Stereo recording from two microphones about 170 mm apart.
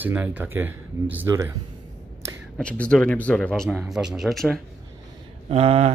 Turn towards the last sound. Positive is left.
turn(degrees=-35)  # may be behind; listen again after turning